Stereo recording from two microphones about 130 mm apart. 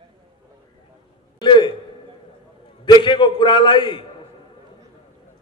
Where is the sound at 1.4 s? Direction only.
35° left (ahead or behind).